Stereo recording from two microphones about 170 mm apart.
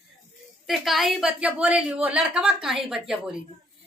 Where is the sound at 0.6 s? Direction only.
Centre (ahead or behind).